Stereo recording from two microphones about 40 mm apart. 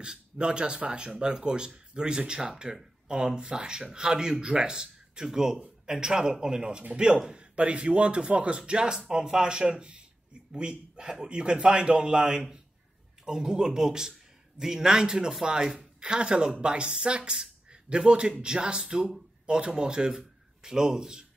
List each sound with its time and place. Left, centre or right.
0.0 s speech: right